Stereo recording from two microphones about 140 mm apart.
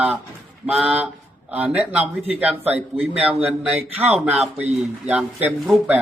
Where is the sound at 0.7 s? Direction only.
10° right (ahead or behind).